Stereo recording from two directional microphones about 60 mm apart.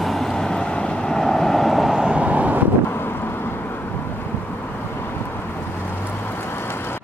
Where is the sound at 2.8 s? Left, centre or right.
Left.